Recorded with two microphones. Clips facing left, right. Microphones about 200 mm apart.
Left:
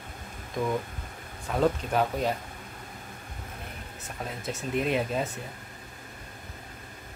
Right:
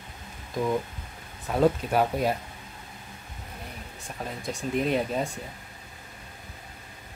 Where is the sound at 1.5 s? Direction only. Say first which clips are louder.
Right 3 dB; 10° right (ahead or behind).